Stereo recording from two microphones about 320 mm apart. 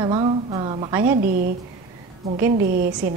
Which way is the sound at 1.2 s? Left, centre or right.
Right.